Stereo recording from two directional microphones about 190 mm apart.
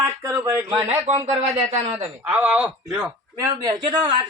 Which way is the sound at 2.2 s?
10° right (ahead or behind).